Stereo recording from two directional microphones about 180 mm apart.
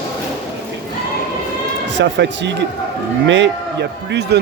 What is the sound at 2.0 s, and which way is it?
A man's voice, 75° right (ahead or behind).